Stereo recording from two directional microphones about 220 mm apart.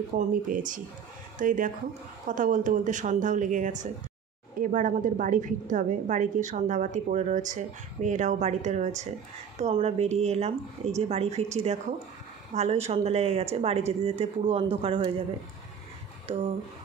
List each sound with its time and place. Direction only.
0.2 s a woman's voice: 35° right (ahead or behind)